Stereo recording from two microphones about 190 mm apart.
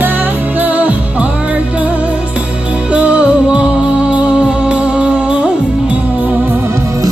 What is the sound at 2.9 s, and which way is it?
Music, 5° right (ahead or behind).